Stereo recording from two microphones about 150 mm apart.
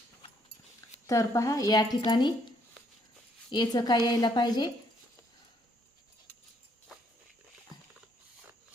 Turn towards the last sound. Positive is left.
turn(degrees=25)  # may be behind; listen again after turning